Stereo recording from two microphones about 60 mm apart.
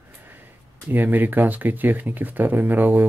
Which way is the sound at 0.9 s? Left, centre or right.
Right.